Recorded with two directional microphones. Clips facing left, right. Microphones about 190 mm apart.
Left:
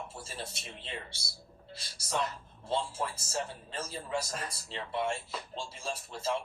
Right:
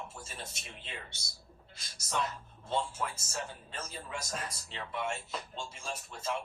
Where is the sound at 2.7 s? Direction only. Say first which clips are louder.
Left 1 dB; 30° left (ahead or behind).